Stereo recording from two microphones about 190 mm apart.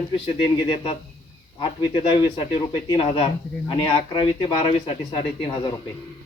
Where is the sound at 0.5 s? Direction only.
25° left (ahead or behind).